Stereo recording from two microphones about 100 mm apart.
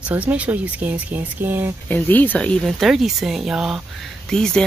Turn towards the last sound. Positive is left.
turn(degrees=5)  # may be behind; listen again after turning